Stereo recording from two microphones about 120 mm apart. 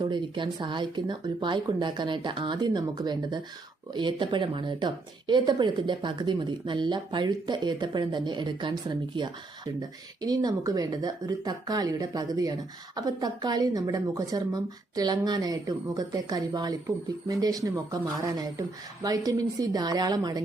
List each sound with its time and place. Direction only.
0.0 s speech: 40° right (ahead or behind)